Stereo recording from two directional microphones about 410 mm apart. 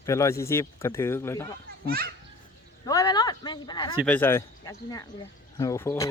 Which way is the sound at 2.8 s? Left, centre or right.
Centre.